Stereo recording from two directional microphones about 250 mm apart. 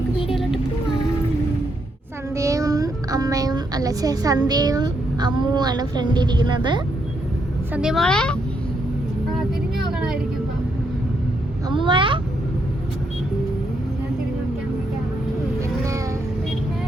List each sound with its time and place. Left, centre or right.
0.3 s vehicle: centre
2.3 s a child's voice: centre
7.7 s a woman's voice: centre
9.8 s vehicle: centre
11.7 s a sound: centre